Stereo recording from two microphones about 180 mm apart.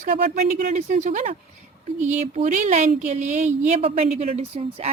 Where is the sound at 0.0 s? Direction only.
45° right (ahead or behind).